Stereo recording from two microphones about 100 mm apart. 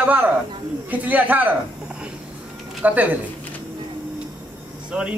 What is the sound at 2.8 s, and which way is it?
Speech, 15° right (ahead or behind).